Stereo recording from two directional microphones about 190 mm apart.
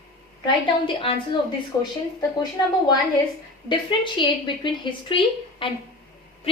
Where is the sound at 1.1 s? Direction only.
30° left (ahead or behind).